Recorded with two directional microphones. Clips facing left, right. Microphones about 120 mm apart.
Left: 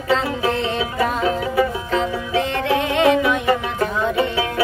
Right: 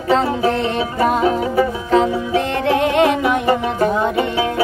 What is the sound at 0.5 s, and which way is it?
Music, 50° right (ahead or behind).